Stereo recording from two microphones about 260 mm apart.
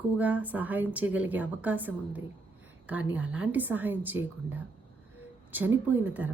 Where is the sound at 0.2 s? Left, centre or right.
Centre.